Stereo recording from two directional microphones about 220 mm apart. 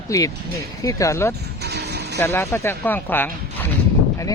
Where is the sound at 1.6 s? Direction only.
50° right (ahead or behind).